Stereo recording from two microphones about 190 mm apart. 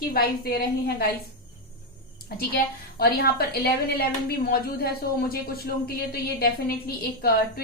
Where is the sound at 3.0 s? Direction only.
55° left (ahead or behind).